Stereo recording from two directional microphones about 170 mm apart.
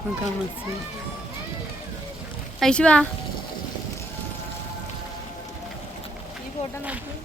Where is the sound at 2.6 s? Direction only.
5° left (ahead or behind).